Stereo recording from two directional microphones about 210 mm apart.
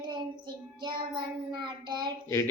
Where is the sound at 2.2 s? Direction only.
15° left (ahead or behind).